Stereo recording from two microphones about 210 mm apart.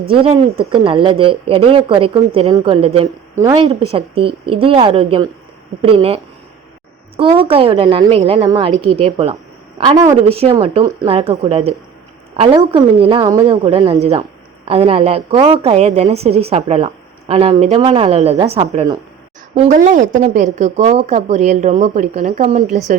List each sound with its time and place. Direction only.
0.1 s a woman's voice: 25° right (ahead or behind)
7.2 s a woman's voice: 25° right (ahead or behind)